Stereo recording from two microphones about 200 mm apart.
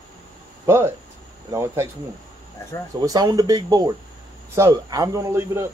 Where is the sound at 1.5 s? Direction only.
15° right (ahead or behind).